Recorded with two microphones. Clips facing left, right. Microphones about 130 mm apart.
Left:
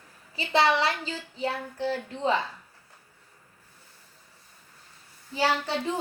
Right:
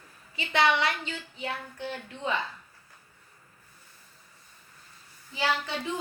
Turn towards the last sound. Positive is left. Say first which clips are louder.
# left 4 dB
turn(degrees=35)  # may be behind; listen again after turning